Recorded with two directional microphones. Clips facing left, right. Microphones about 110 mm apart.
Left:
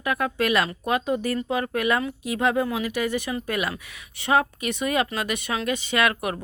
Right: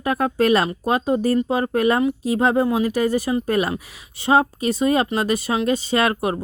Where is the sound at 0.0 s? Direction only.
35° right (ahead or behind).